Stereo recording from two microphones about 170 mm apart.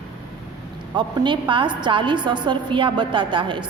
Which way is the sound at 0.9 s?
25° right (ahead or behind).